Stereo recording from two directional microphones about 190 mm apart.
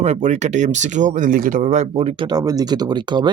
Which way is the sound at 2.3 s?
20° right (ahead or behind).